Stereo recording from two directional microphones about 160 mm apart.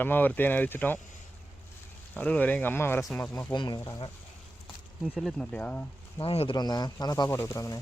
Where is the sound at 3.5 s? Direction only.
25° left (ahead or behind).